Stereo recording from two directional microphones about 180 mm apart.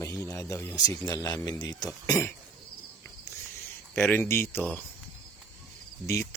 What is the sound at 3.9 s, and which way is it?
Speech, 10° left (ahead or behind).